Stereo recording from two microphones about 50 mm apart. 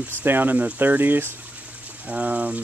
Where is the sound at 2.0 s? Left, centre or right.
Right.